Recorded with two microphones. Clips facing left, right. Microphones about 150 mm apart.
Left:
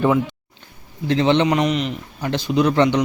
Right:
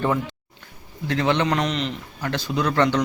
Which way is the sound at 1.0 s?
25° left (ahead or behind).